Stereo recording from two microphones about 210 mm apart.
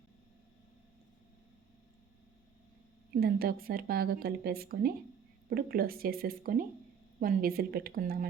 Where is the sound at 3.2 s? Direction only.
45° right (ahead or behind).